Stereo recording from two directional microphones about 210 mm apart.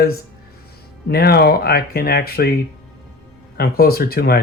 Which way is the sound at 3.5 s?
50° left (ahead or behind).